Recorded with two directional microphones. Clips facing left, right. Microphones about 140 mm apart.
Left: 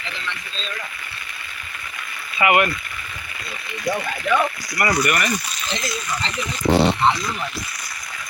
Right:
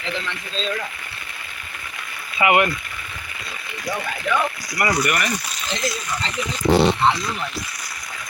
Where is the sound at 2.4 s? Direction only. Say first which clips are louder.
Even; 20° right (ahead or behind).